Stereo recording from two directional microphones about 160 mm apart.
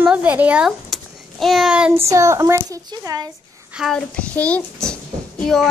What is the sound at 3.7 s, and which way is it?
A child's voice, centre (ahead or behind).